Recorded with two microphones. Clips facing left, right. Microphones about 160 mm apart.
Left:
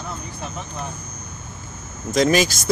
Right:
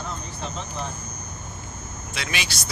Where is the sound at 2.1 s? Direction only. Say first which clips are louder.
Left 15 dB; 40° left (ahead or behind).